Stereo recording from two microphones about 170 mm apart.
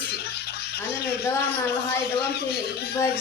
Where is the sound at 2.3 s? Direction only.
70° left (ahead or behind).